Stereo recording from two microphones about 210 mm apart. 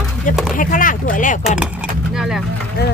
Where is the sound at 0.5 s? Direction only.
40° left (ahead or behind).